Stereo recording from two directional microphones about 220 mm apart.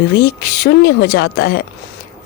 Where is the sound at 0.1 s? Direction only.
45° left (ahead or behind).